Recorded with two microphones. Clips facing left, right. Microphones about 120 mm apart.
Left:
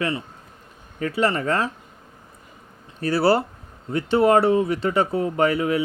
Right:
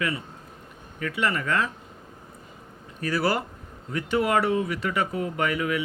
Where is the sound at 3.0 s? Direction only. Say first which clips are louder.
Left 6 dB; 30° left (ahead or behind).